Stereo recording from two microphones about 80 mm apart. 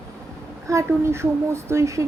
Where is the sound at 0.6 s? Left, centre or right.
Right.